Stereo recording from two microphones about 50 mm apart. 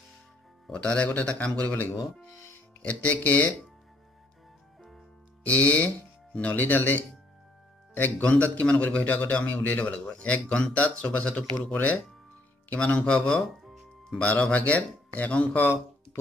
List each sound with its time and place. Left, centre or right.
0.7 s speech: left
2.8 s a man's voice: left
5.4 s speech: left
6.5 s a man's voice: left
12.6 s a man's voice: left
15.6 s a sound: left